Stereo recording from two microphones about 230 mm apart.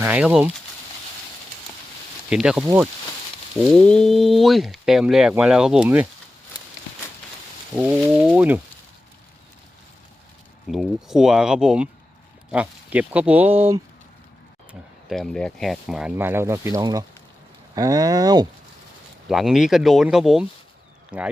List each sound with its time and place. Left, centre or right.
0.0 s speech: centre
2.3 s speech: centre
7.8 s speech: centre
10.7 s speech: centre
14.7 s speech: centre
19.3 s speech: centre